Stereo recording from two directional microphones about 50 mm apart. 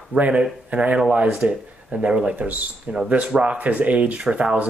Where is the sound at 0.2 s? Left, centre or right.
Right.